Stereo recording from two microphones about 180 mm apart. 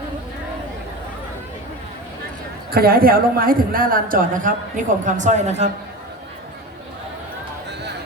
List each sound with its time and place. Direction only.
2.7 s a woman's voice: 55° right (ahead or behind); by 5.7 s 40° right (ahead or behind)